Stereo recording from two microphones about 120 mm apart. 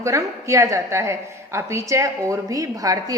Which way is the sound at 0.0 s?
25° right (ahead or behind).